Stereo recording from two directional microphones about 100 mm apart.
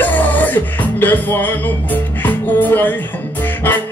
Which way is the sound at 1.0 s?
20° left (ahead or behind).